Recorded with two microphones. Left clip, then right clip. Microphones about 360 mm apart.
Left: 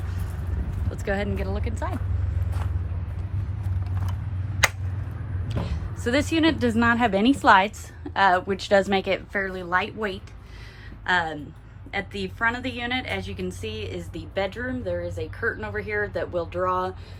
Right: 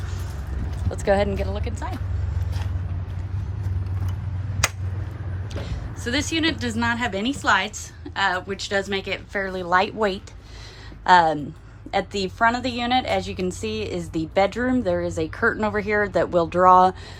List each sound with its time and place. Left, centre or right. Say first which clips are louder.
0.9 s a woman's voice: right 7 dB; centre
5.6 s a woman's voice: left 2 dB; centre